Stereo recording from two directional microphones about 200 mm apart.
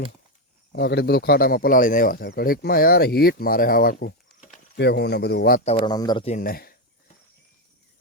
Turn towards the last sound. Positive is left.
turn(degrees=50)  # may be behind; listen again after turning